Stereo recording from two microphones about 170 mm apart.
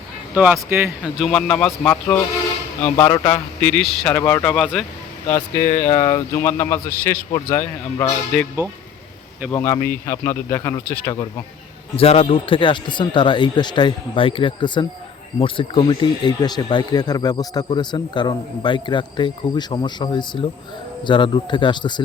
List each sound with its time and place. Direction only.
0.3 s speech: 10° right (ahead or behind)
1.2 s a man's voice: 5° left (ahead or behind)
4.2 s speech: 20° left (ahead or behind)
4.4 s a man's voice: 5° left (ahead or behind)
5.3 s speech: 15° left (ahead or behind)
8.3 s a man's voice: 5° left (ahead or behind)
11.9 s speech: 35° left (ahead or behind)